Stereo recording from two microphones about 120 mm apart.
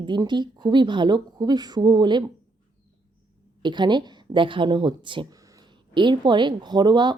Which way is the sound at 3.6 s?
40° right (ahead or behind).